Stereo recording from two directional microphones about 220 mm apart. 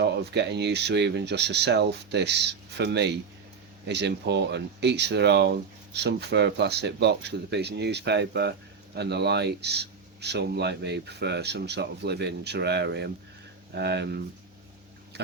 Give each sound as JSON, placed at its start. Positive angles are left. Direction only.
{"t": 0.0, "sound": "speech", "side_deg": -50}